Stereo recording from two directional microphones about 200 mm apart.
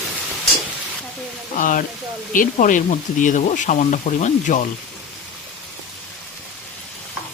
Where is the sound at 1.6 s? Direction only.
40° left (ahead or behind).